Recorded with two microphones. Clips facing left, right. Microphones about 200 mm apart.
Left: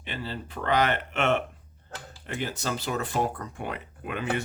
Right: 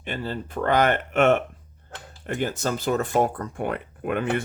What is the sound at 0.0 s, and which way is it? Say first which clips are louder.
Speech: right 5 dB; 50° right (ahead or behind).